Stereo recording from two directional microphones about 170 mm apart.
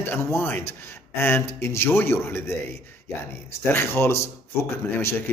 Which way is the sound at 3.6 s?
15° left (ahead or behind).